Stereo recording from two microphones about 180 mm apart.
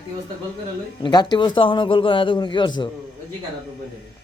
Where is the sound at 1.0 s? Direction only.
25° left (ahead or behind).